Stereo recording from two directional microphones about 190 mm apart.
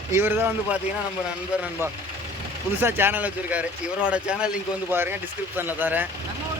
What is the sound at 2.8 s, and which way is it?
Speech, 10° right (ahead or behind).